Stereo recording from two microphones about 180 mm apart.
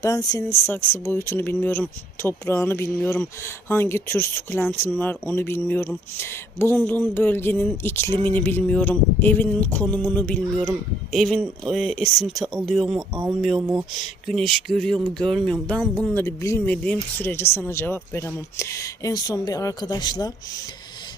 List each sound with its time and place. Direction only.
0.0 s speech: 20° left (ahead or behind)